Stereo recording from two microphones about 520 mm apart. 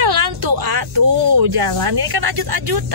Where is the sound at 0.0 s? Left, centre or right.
Right.